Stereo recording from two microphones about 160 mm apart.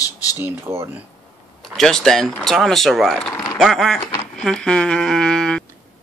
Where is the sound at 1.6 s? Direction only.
Centre (ahead or behind).